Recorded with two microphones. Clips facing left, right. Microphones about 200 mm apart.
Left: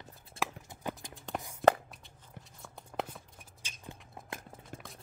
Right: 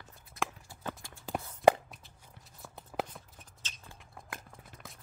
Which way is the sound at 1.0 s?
20° left (ahead or behind).